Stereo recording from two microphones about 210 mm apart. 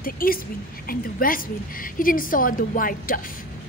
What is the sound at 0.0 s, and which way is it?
A woman's voice, 45° left (ahead or behind).